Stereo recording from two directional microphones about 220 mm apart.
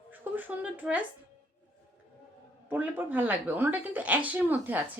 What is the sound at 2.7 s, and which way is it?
A woman's voice, 10° right (ahead or behind).